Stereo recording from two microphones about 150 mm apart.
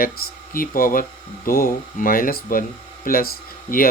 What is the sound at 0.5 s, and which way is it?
Speech, 70° left (ahead or behind).